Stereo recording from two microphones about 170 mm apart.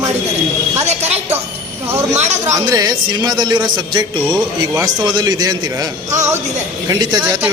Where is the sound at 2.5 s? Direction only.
20° right (ahead or behind).